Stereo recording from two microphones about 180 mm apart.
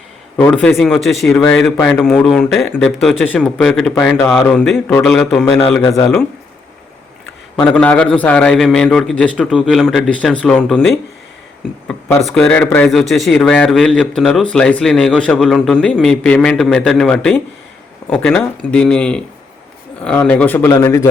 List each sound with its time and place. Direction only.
0.3 s a man's voice: 10° left (ahead or behind)
5.8 s speech: 20° left (ahead or behind)
7.5 s a man's voice: 5° left (ahead or behind)